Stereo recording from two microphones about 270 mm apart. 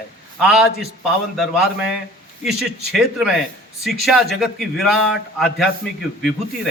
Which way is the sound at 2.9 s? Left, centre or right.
Centre.